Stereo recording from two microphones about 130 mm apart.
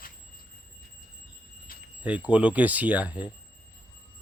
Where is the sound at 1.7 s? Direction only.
90° left.